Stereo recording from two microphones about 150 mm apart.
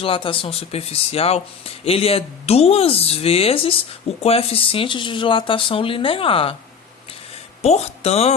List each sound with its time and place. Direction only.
0.0 s speech: 35° left (ahead or behind)
7.6 s speech: 45° left (ahead or behind)